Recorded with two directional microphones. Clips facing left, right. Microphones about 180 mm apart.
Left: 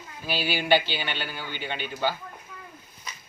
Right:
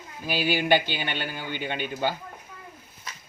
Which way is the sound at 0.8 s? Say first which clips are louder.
Right 1 dB; 50° right (ahead or behind).